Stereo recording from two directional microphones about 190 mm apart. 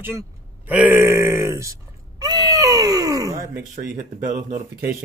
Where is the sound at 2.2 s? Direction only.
20° right (ahead or behind).